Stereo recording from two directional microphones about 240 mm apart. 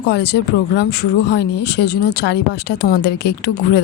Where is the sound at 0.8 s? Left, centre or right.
Left.